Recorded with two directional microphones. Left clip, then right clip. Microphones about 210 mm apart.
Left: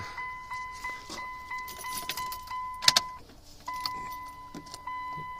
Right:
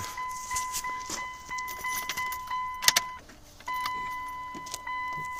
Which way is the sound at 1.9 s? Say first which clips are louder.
Right 2 dB; 20° left (ahead or behind).